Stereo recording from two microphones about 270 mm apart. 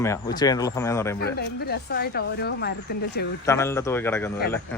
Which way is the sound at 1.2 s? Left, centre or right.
Left.